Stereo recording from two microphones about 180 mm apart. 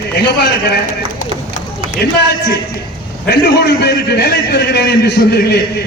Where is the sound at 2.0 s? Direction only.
65° left (ahead or behind).